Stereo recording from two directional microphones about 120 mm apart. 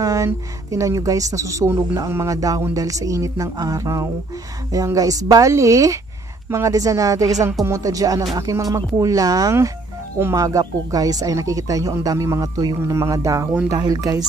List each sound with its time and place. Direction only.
0.0 s speech: 25° right (ahead or behind)